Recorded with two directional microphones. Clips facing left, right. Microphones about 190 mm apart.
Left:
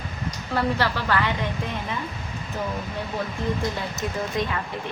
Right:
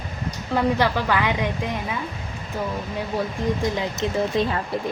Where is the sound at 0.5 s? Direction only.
15° right (ahead or behind).